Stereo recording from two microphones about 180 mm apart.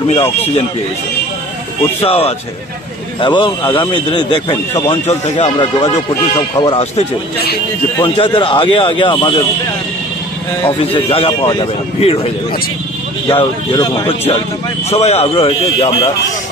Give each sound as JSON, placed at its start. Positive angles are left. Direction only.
{"t": 2.0, "sound": "a man's voice", "side_deg": 35}
{"t": 5.0, "sound": "a man's voice", "side_deg": 35}
{"t": 10.8, "sound": "a man's voice", "side_deg": 30}
{"t": 13.3, "sound": "a man's voice", "side_deg": 30}